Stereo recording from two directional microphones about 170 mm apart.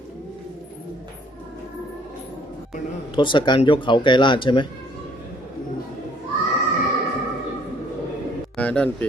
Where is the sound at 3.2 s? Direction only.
30° left (ahead or behind).